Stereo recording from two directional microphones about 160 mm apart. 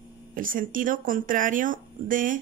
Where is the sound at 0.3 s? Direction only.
60° right (ahead or behind).